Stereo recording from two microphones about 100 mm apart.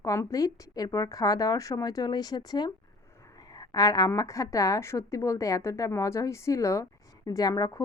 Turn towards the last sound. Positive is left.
turn(degrees=40)  # may be behind; listen again after turning